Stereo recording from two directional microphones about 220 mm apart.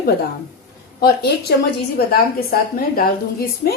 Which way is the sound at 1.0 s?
45° left (ahead or behind).